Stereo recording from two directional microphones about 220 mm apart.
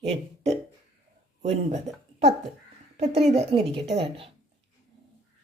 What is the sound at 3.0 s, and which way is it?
Speech, 30° right (ahead or behind).